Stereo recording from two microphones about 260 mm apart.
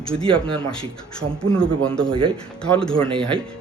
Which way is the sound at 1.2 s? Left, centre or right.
Right.